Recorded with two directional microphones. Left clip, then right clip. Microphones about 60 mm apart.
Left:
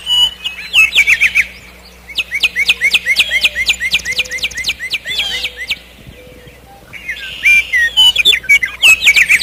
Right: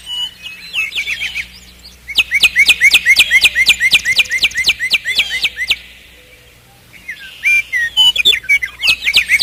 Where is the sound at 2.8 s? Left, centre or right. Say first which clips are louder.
Right 3 dB; right.